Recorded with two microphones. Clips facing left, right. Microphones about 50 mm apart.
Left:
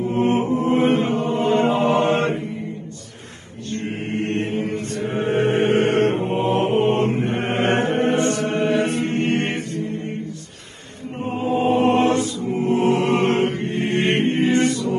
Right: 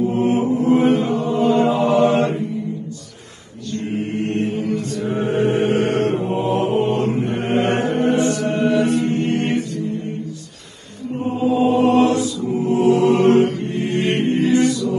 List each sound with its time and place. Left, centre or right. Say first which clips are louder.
0.1 s chant: right 1 dB; left
3.7 s chant: right 2 dB; left
11.3 s music: right 2 dB; left